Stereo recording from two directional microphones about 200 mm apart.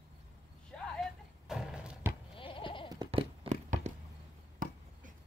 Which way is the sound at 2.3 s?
25° left (ahead or behind).